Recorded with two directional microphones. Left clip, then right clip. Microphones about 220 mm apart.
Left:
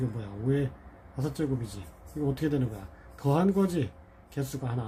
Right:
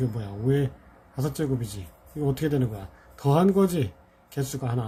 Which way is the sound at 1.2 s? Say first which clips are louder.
Right 3 dB; 25° right (ahead or behind).